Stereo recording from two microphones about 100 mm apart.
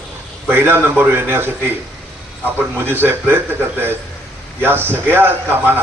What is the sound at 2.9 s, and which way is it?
Speech, 20° right (ahead or behind).